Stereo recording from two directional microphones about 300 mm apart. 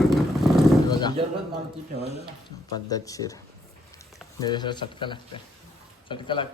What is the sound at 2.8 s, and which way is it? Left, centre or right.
Speech, centre.